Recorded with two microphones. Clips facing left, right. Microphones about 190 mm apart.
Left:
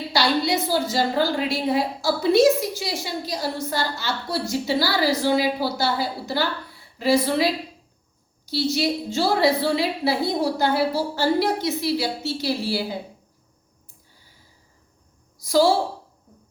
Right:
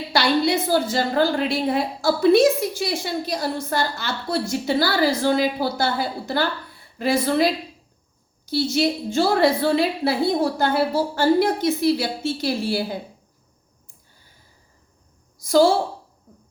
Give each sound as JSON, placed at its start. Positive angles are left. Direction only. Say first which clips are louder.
{"t": 0.1, "sound": "a woman's voice", "louder": "right 2 dB", "side_deg": -55}
{"t": 15.4, "sound": "a woman's voice", "louder": "right 2 dB", "side_deg": -50}